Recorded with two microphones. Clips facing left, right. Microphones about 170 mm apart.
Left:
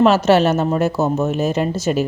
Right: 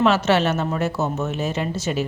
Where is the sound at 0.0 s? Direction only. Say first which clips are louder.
Left 5 dB; 40° left (ahead or behind).